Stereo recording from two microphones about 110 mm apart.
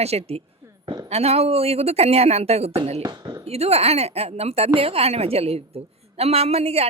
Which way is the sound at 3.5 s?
70° right (ahead or behind).